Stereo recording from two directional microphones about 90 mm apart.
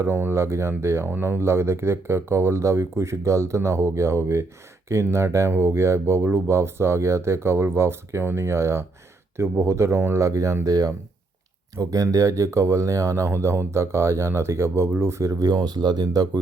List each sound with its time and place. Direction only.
0.0 s speech: 25° right (ahead or behind); by 16.4 s 50° right (ahead or behind)